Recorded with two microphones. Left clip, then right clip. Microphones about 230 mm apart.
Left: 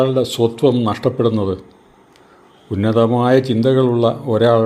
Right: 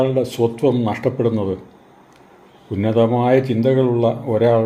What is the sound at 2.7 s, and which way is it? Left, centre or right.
Speech, left.